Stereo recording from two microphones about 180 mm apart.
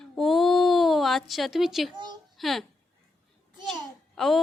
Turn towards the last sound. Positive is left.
turn(degrees=0)  # may be behind; listen again after turning